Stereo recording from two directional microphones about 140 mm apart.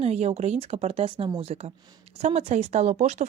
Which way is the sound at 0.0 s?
50° right (ahead or behind).